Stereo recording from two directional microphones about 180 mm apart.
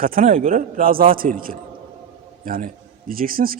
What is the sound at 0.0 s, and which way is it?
Speech, 50° right (ahead or behind).